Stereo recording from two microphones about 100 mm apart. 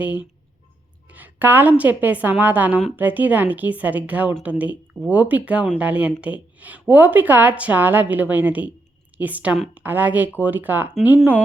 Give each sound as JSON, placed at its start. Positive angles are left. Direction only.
{"t": 0.0, "sound": "a woman's voice", "side_deg": -15}